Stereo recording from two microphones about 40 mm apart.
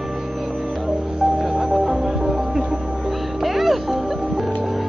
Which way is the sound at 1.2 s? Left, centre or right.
Centre.